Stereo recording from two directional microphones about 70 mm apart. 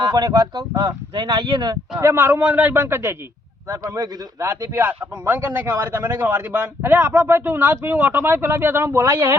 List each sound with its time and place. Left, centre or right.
0.1 s a man's voice: right
1.2 s speech: right
2.1 s speech: right
3.7 s a man's voice: right
4.4 s speech: right
4.9 s speech: right